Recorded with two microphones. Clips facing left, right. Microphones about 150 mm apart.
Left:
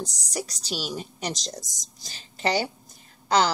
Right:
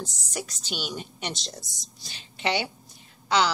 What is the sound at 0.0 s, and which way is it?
A woman's voice, 40° left (ahead or behind).